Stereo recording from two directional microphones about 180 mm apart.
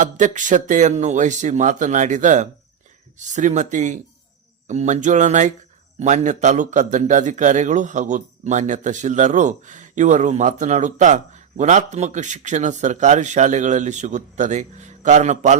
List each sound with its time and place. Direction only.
0.0 s a man's voice: 45° right (ahead or behind)